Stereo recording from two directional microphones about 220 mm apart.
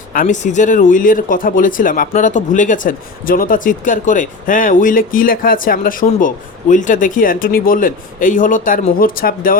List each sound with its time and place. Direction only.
0.1 s speech: 35° left (ahead or behind)